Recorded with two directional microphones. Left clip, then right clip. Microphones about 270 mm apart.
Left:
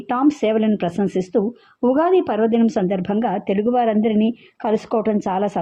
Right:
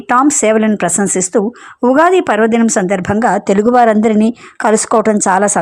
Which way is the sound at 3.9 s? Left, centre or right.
Right.